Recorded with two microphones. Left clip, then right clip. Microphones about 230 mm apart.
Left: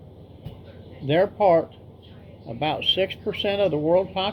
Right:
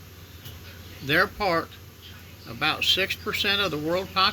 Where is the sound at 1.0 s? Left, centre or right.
Centre.